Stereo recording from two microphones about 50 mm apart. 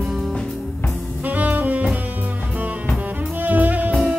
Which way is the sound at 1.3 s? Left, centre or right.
Right.